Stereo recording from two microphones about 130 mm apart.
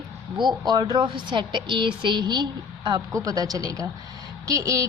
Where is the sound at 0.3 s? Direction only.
35° right (ahead or behind).